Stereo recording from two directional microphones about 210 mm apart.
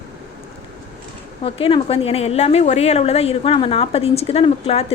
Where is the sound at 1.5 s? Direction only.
25° left (ahead or behind).